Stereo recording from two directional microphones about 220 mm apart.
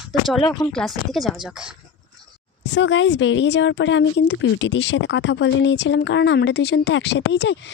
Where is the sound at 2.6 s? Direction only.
55° left (ahead or behind).